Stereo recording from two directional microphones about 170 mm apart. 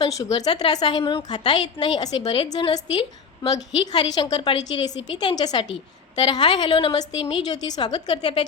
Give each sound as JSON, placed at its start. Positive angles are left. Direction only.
{"t": 0.0, "sound": "a woman's voice", "side_deg": 20}